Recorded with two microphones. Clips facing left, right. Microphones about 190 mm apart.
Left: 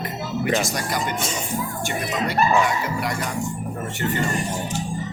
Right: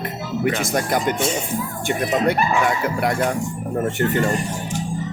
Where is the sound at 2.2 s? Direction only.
55° right (ahead or behind).